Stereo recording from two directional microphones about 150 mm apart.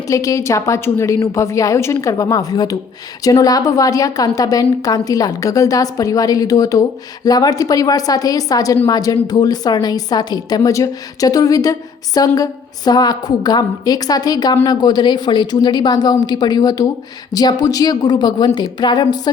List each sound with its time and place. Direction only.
0.1 s a woman's voice: 20° left (ahead or behind)